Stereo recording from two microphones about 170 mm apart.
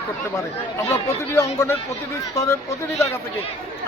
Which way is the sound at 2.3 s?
20° left (ahead or behind).